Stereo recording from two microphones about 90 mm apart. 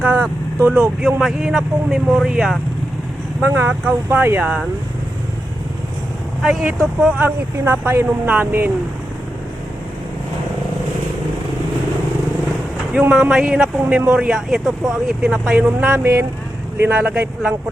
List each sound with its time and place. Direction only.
0.0 s vehicle: 20° right (ahead or behind)
0.7 s speech: 10° right (ahead or behind)
3.4 s speech: 20° right (ahead or behind)
6.4 s speech: 10° right (ahead or behind)
7.2 s speech: 25° right (ahead or behind)
12.9 s speech: 15° right (ahead or behind)
15.3 s speech: 15° right (ahead or behind)